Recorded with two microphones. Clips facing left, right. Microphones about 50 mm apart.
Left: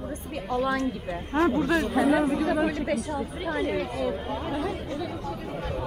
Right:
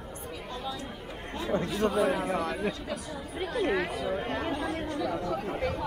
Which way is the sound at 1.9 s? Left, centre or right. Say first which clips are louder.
Left 5 dB; left.